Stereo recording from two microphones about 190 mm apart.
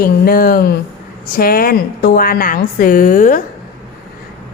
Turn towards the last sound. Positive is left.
turn(degrees=45)  # may be behind; listen again after turning